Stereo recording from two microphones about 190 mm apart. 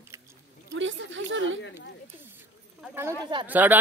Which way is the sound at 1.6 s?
70° left (ahead or behind).